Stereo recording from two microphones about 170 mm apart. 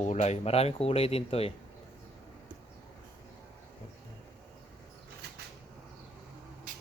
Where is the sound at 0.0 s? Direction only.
40° left (ahead or behind).